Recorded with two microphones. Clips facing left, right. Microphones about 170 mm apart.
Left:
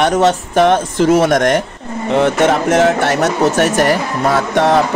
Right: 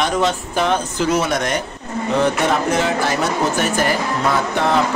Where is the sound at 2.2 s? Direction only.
90° left.